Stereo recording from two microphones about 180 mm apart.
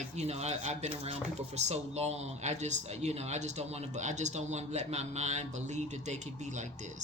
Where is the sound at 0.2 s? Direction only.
35° right (ahead or behind).